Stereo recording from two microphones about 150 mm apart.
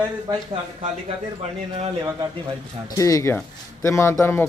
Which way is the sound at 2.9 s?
20° left (ahead or behind).